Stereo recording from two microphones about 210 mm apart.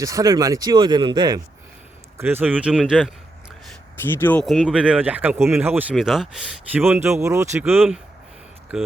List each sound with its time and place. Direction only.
0.0 s speech: 15° right (ahead or behind)
2.1 s a man's voice: 10° right (ahead or behind)
4.0 s speech: 10° left (ahead or behind); by 7.9 s 5° right (ahead or behind)